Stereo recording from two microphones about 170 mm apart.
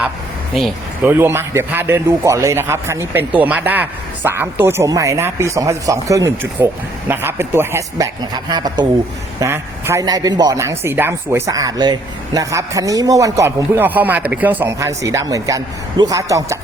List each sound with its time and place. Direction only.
1.0 s speech: 10° right (ahead or behind)